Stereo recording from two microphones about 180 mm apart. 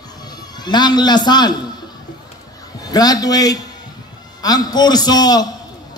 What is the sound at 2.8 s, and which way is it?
A man's voice, 20° left (ahead or behind).